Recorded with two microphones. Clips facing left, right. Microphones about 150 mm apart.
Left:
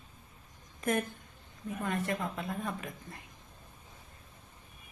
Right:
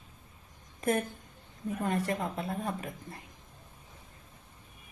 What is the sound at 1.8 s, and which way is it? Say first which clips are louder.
Speech: right 2 dB; 35° right (ahead or behind).